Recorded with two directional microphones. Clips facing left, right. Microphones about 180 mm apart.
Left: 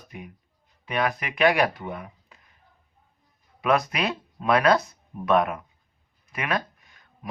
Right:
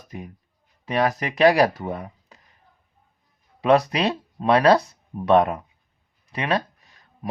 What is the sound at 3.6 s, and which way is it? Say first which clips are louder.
Speech: right 5 dB; 35° right (ahead or behind).